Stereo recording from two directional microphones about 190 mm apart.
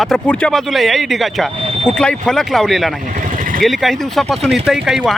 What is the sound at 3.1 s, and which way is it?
Vehicle, 45° right (ahead or behind).